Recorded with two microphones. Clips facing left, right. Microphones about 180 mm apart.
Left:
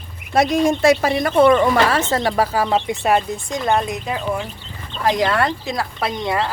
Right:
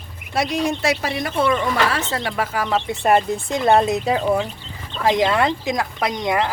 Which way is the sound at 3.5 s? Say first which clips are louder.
Right 4 dB; 30° right (ahead or behind).